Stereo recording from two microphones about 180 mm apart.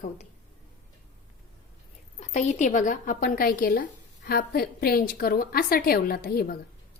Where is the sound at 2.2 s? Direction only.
40° left (ahead or behind).